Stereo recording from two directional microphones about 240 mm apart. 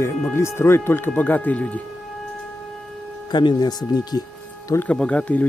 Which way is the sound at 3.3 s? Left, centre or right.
Centre.